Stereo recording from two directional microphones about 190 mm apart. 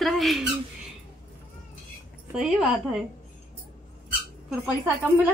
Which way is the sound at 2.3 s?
5° right (ahead or behind).